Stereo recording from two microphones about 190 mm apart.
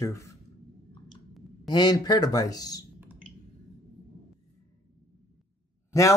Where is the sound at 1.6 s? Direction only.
20° left (ahead or behind).